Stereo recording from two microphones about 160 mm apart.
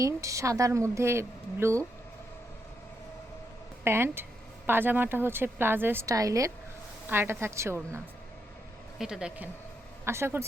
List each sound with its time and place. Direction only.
0.0 s a woman's voice: 20° right (ahead or behind)
3.8 s speech: 15° right (ahead or behind)
9.0 s a woman's voice: 5° right (ahead or behind)
10.1 s speech: 15° right (ahead or behind)